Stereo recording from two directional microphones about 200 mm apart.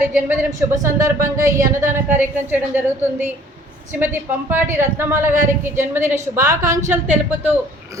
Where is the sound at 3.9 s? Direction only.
10° right (ahead or behind).